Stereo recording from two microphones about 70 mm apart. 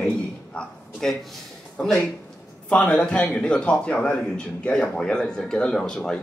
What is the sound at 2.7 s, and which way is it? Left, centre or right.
A man's voice, centre.